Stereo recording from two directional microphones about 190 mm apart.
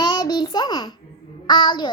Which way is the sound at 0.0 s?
20° left (ahead or behind).